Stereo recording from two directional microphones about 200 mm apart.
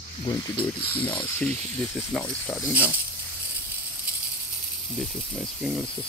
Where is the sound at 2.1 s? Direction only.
5° left (ahead or behind).